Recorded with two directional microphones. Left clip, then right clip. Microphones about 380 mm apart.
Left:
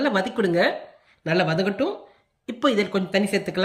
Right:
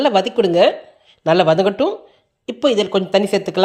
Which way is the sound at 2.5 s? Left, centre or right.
Centre.